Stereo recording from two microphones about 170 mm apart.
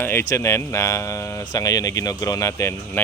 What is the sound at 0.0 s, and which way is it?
Speech, 15° left (ahead or behind).